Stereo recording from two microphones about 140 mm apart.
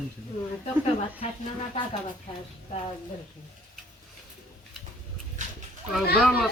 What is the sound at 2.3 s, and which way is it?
Speech, 35° left (ahead or behind).